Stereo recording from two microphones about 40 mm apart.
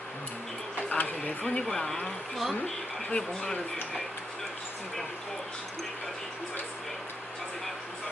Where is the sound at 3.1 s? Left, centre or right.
Centre.